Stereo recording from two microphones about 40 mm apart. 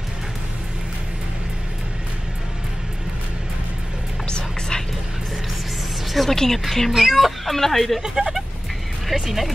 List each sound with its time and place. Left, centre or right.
4.3 s whispering: centre
6.1 s speech: centre
8.0 s speech: centre
9.1 s speech: centre